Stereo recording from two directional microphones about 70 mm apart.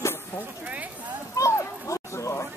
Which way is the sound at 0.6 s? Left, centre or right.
Right.